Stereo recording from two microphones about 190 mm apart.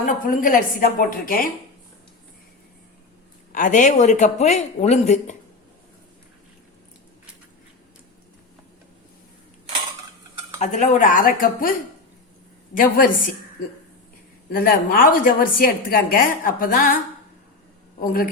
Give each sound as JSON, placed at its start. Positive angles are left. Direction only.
{"t": 0.0, "sound": "a woman's voice", "side_deg": 45}
{"t": 3.5, "sound": "speech", "side_deg": 45}
{"t": 10.6, "sound": "a woman's voice", "side_deg": 40}
{"t": 14.5, "sound": "a woman's voice", "side_deg": 50}
{"t": 18.0, "sound": "a woman's voice", "side_deg": 50}